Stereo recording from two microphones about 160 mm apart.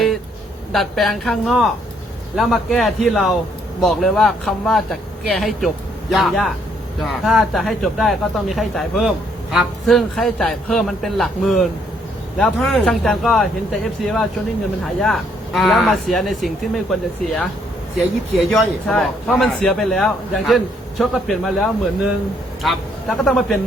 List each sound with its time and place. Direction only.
0.7 s speech: centre (ahead or behind)